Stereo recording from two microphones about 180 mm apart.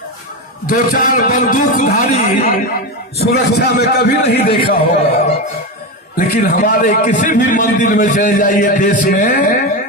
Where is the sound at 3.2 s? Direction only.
65° left (ahead or behind).